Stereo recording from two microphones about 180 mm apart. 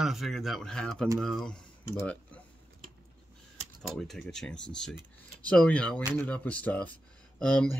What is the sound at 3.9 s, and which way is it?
Speech, centre (ahead or behind).